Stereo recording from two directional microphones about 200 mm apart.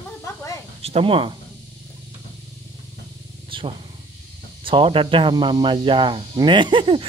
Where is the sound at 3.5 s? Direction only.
25° right (ahead or behind).